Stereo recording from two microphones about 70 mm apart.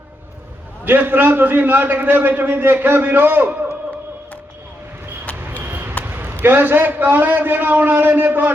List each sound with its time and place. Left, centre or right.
0.9 s a man's voice: right
5.6 s basketball bounce: right
6.1 s a sound: right
6.4 s a man's voice: right